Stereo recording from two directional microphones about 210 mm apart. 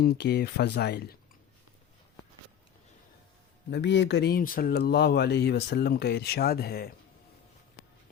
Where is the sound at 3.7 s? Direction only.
55° left (ahead or behind).